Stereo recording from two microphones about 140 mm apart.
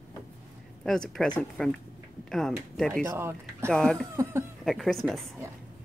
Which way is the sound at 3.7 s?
5° left (ahead or behind).